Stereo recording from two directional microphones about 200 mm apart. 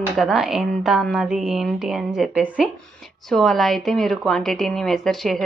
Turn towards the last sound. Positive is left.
turn(degrees=0)  # may be behind; listen again after turning